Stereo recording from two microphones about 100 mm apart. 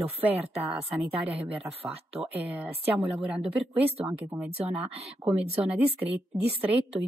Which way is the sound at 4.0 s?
20° right (ahead or behind).